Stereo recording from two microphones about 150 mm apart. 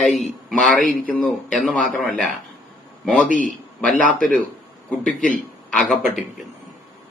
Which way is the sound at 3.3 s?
60° left (ahead or behind).